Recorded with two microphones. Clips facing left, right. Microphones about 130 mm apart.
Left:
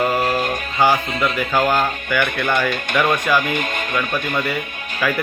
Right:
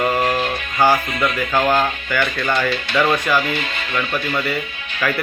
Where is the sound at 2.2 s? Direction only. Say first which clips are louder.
Left 1 dB; 55° left (ahead or behind).